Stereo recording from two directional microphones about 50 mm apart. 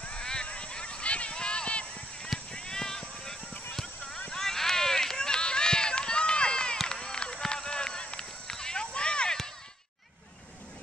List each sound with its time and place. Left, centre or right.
0.0 s a sound: centre
2.5 s clip-clop: centre
4.3 s run: centre